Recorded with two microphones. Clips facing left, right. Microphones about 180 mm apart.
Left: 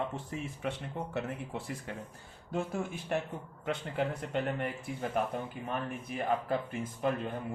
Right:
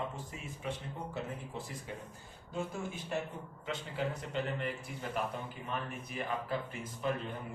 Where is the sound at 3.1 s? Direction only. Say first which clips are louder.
Left 5 dB; 60° left (ahead or behind).